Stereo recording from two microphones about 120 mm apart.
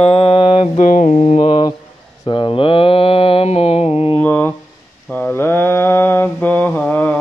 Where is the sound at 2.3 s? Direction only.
45° left (ahead or behind).